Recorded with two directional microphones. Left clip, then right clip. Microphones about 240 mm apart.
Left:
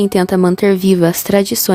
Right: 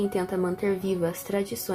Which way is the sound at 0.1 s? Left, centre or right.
Left.